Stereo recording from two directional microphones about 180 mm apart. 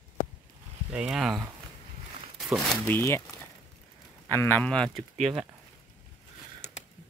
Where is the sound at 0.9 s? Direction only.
5° right (ahead or behind).